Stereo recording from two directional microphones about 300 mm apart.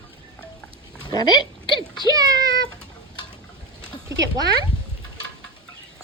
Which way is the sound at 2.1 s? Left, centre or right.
Centre.